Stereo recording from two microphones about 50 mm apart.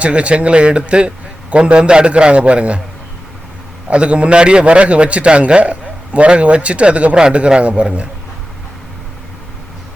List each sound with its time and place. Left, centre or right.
0.0 s a man's voice: right
3.8 s a man's voice: right